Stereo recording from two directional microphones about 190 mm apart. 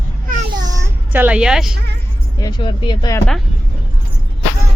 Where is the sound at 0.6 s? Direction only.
15° right (ahead or behind).